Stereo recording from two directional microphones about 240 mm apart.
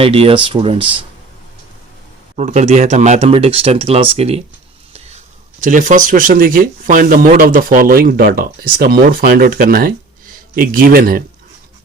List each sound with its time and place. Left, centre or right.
0.0 s speech: right
2.3 s speech: right
5.6 s speech: right